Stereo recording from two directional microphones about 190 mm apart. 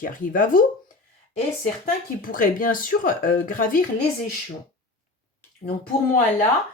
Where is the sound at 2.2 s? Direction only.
45° left (ahead or behind).